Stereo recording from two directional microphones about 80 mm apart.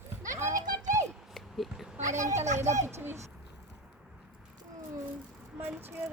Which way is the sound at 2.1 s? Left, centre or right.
Right.